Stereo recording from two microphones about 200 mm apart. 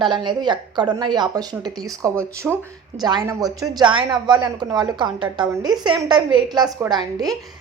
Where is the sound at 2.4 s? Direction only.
5° right (ahead or behind).